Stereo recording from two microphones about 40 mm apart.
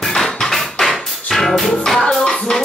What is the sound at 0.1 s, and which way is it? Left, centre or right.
Music, centre.